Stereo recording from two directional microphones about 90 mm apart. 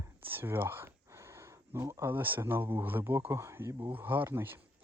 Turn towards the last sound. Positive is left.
turn(degrees=-25)  # may be behind; listen again after turning